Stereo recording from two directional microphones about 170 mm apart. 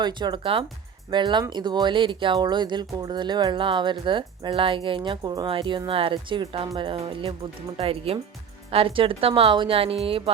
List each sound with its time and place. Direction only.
0.0 s a woman's voice: 25° right (ahead or behind)